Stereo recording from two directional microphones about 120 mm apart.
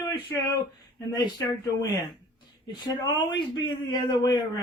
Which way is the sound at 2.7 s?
35° left (ahead or behind).